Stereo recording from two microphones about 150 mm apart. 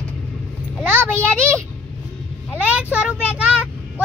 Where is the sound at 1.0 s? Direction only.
15° right (ahead or behind).